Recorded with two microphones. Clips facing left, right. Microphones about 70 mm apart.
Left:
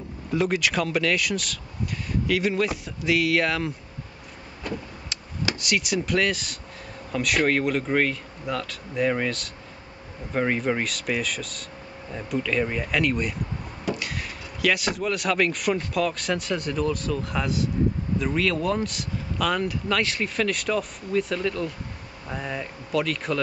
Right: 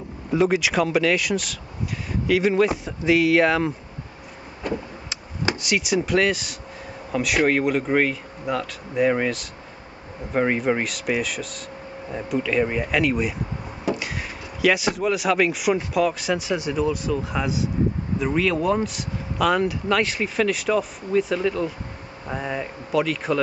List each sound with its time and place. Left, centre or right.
0.3 s speech: centre
4.6 s vehicle: centre
5.7 s speech: centre